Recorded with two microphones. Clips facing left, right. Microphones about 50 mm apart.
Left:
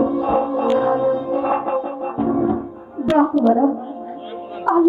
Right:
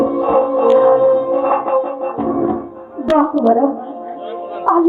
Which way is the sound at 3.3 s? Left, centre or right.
Centre.